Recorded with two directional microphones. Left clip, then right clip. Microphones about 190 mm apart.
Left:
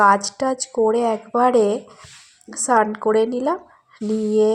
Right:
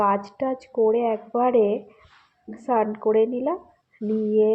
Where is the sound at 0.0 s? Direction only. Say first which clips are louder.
Left 7 dB; 25° left (ahead or behind).